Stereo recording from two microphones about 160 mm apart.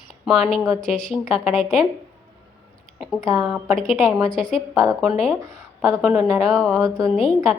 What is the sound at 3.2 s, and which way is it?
A woman's voice, 20° right (ahead or behind).